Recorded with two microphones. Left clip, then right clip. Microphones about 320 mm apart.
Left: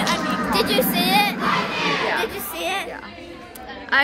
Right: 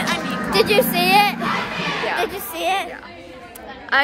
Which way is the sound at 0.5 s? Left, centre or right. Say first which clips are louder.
Right 6 dB; right.